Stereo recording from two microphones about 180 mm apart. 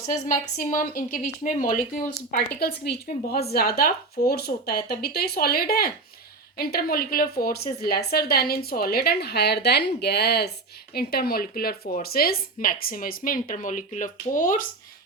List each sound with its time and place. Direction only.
0.0 s speech: 40° left (ahead or behind)
2.3 s a woman's voice: 60° left (ahead or behind)